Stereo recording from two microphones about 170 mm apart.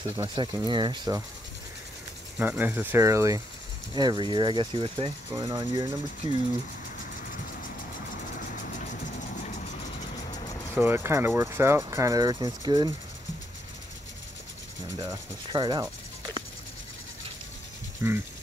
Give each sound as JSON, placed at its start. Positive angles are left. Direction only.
{"t": 0.2, "sound": "speech", "side_deg": -20}
{"t": 2.3, "sound": "speech", "side_deg": -10}
{"t": 10.7, "sound": "speech", "side_deg": -15}
{"t": 15.0, "sound": "speech", "side_deg": -25}
{"t": 18.0, "sound": "speech", "side_deg": -15}